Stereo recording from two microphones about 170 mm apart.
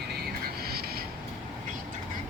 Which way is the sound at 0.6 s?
65° right (ahead or behind).